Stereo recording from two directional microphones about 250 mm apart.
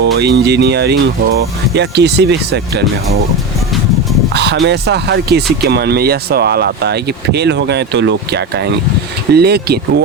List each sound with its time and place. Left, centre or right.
0.0 s speech: right
4.4 s speech: right